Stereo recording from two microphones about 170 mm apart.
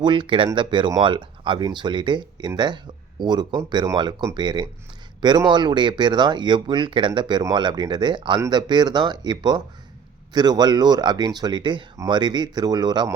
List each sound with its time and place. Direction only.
0.0 s speech: 30° right (ahead or behind)